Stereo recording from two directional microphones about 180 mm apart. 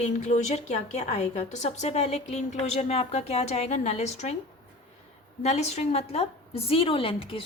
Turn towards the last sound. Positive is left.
turn(degrees=30)  # may be behind; listen again after turning